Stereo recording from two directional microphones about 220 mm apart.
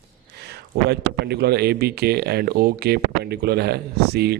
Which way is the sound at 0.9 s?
50° right (ahead or behind).